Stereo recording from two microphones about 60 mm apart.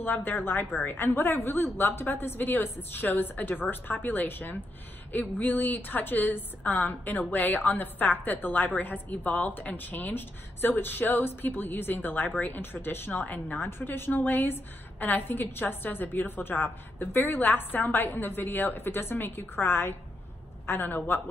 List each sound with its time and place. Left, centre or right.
0.0 s a woman's voice: left